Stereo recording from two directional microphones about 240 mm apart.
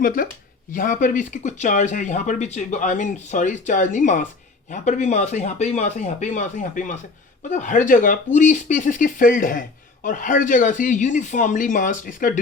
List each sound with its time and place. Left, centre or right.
0.0 s speech: left